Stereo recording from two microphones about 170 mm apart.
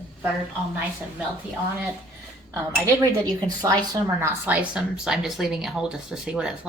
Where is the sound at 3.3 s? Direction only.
25° right (ahead or behind).